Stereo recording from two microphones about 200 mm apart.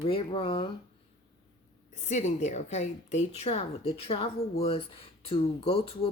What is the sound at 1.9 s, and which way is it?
A woman's voice, 35° left (ahead or behind).